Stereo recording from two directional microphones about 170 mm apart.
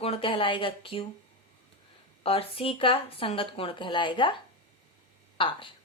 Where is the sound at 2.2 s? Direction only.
35° left (ahead or behind).